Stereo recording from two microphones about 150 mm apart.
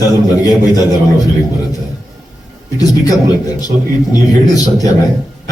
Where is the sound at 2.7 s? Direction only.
25° left (ahead or behind).